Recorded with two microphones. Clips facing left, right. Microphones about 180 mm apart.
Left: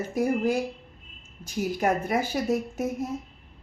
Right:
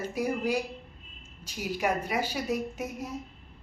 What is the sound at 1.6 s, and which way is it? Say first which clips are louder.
A woman's voice: left 4 dB; 50° left (ahead or behind).